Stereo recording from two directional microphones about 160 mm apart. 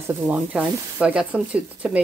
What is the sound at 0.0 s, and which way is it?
Speech, 10° right (ahead or behind).